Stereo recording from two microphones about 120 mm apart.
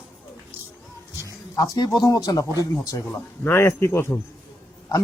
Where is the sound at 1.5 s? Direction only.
30° left (ahead or behind).